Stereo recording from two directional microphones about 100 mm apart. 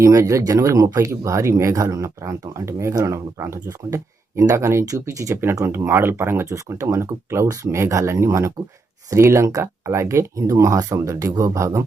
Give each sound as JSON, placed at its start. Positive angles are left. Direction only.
{"t": 0.0, "sound": "speech", "side_deg": -35}